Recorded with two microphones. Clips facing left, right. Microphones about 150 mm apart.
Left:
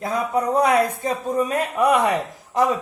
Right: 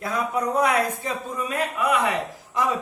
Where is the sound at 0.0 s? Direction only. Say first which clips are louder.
Left 3 dB; 25° left (ahead or behind).